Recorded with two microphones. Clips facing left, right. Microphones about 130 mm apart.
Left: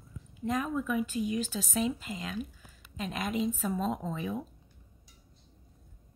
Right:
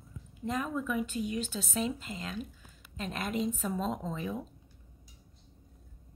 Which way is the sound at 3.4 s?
5° left (ahead or behind).